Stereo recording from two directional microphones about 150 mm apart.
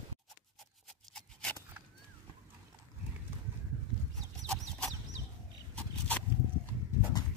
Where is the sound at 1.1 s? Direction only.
5° left (ahead or behind).